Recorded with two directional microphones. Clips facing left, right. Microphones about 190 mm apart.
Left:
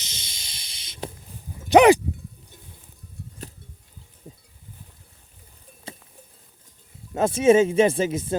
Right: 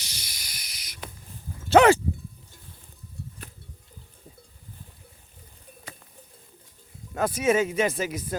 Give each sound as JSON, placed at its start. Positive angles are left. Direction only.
{"t": 0.0, "sound": "a sound", "side_deg": 20}
{"t": 1.5, "sound": "dog", "side_deg": 15}
{"t": 7.1, "sound": "speech", "side_deg": 25}